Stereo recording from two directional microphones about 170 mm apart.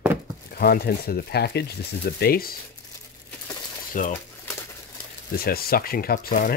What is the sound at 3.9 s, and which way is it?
Speech, 50° left (ahead or behind).